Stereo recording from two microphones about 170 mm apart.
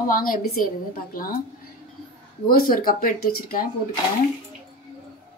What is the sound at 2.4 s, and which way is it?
Speech, 60° left (ahead or behind).